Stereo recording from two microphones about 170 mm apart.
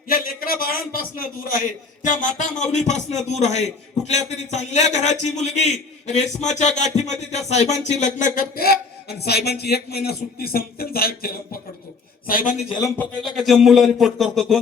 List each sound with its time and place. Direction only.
0.1 s a man's voice: 60° left (ahead or behind)
12.3 s a man's voice: 50° left (ahead or behind)
13.3 s speech: centre (ahead or behind)